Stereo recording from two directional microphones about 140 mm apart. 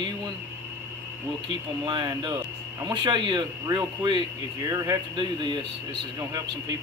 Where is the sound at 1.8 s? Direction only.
30° right (ahead or behind).